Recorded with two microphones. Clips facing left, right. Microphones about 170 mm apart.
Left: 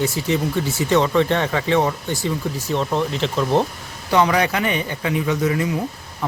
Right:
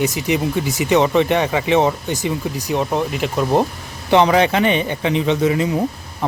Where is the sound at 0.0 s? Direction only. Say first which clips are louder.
Right 2 dB; 15° right (ahead or behind).